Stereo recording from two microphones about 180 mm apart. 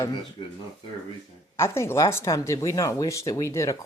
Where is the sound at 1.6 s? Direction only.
15° left (ahead or behind).